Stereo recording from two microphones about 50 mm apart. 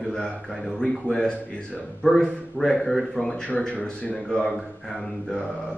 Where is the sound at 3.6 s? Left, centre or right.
Left.